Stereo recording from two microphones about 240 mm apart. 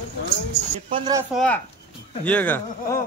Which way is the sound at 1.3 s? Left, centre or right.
Centre.